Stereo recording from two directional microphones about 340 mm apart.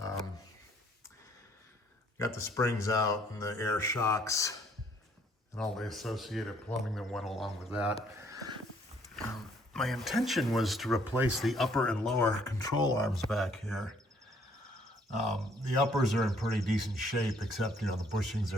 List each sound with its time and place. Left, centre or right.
2.1 s speech: centre
5.5 s speech: centre
8.2 s a sound: centre
9.7 s speech: centre
15.9 s speech: centre